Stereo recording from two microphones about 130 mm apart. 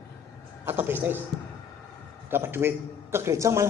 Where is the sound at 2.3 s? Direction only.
15° right (ahead or behind).